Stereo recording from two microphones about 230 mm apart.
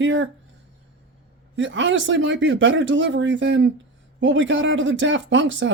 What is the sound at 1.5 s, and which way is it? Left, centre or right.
Speech, right.